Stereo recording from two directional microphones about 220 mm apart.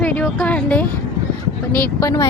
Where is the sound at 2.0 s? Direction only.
15° left (ahead or behind).